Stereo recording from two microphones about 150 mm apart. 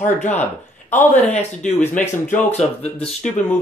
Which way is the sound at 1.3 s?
50° left (ahead or behind).